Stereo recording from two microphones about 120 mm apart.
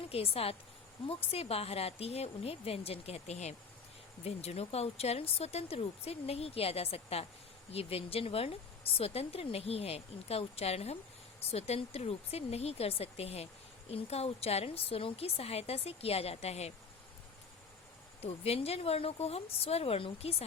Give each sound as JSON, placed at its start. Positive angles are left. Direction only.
{"t": 0.1, "sound": "speech", "side_deg": 55}
{"t": 18.2, "sound": "speech", "side_deg": 55}